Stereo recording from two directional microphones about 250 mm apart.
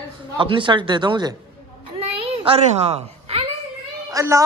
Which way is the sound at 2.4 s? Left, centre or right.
Right.